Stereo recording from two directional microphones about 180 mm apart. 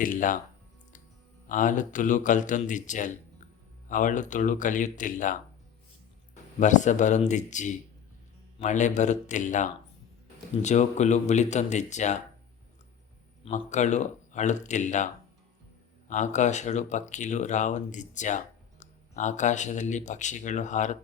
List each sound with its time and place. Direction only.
0.0 s speech: 50° left (ahead or behind)
1.5 s speech: 45° left (ahead or behind)
13.4 s speech: 40° left (ahead or behind)